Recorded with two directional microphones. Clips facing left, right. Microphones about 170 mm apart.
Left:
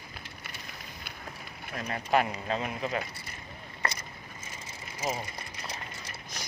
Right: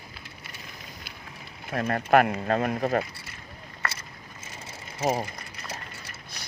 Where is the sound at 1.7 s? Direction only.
55° right (ahead or behind).